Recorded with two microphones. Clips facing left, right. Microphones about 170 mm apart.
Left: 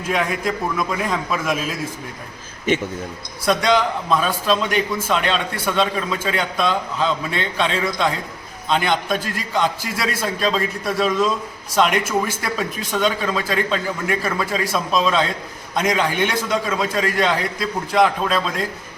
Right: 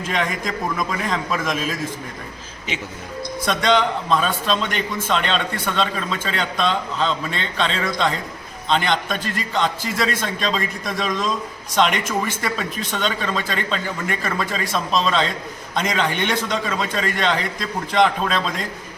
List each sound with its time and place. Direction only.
0.1 s a man's voice: 5° left (ahead or behind)
2.7 s a man's voice: 50° left (ahead or behind)
3.4 s a man's voice: 10° left (ahead or behind)